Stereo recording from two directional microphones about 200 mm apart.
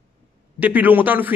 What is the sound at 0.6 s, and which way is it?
Speech, 10° right (ahead or behind).